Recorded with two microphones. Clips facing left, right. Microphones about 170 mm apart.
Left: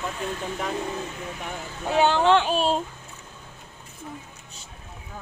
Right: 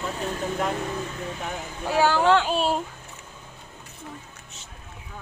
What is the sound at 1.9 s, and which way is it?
Speech, 20° left (ahead or behind).